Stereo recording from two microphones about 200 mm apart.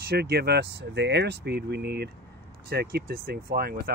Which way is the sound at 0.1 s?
55° right (ahead or behind).